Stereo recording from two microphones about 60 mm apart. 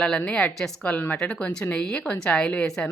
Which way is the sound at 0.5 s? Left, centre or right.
Centre.